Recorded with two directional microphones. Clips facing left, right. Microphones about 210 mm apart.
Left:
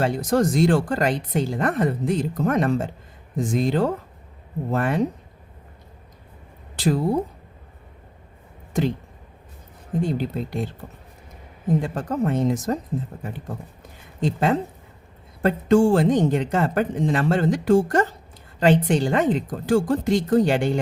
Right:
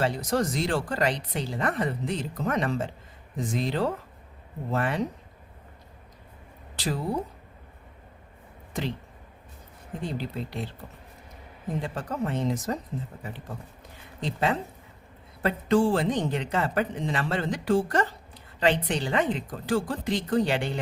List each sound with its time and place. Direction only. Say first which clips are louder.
0.0 s speech: left 5 dB; 50° left (ahead or behind)
6.7 s speech: left 9 dB; 50° left (ahead or behind)
10.0 s speech: left 8 dB; 50° left (ahead or behind)
11.8 s speech: left 6 dB; 45° left (ahead or behind)
14.2 s speech: left 6 dB; 45° left (ahead or behind)